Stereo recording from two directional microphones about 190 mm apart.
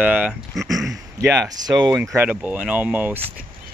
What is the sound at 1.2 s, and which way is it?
Speech, 15° right (ahead or behind).